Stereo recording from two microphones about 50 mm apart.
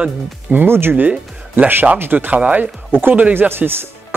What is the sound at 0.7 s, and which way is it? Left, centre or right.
Speech, right.